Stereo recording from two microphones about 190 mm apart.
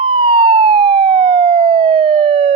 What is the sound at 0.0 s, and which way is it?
Police car, 30° right (ahead or behind).